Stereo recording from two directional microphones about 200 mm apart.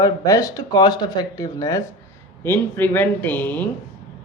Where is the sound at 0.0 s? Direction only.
15° left (ahead or behind).